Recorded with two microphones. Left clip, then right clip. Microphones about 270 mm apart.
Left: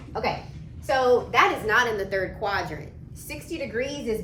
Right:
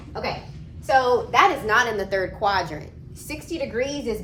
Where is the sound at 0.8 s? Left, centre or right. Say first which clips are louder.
Right 2 dB; centre.